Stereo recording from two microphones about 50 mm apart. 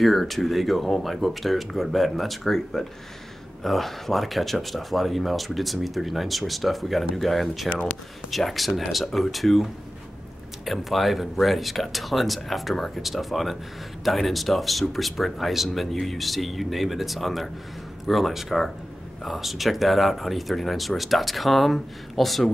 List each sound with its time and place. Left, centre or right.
0.0 s speech: centre